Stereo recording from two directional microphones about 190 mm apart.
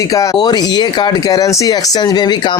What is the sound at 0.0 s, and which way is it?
Speech, 15° left (ahead or behind).